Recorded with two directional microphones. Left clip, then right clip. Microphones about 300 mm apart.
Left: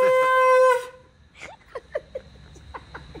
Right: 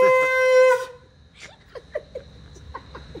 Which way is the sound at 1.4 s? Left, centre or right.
Centre.